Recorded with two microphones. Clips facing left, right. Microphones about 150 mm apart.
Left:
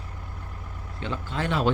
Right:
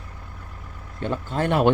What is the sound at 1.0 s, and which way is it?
Speech, 45° right (ahead or behind).